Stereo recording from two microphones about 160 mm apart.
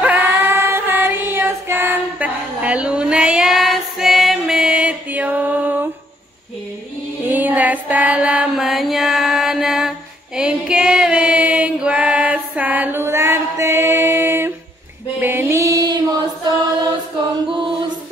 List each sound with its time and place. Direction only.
0.0 s child singing: 10° right (ahead or behind)
7.2 s music: 10° right (ahead or behind)